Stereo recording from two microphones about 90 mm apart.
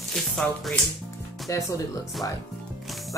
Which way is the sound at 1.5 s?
35° left (ahead or behind).